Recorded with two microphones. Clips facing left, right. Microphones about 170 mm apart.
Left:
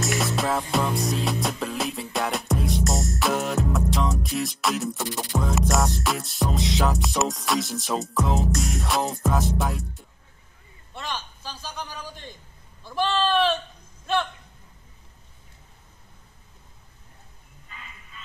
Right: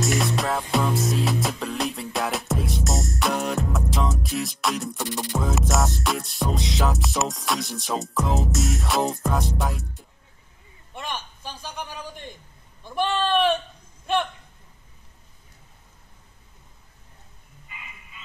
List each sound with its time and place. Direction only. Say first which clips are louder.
0.0 s music: right 1 dB; centre (ahead or behind)
10.9 s a man's voice: even; 15° right (ahead or behind)
17.6 s a sound: even; 10° right (ahead or behind)